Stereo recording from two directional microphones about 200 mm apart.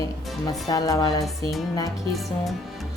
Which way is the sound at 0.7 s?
15° left (ahead or behind).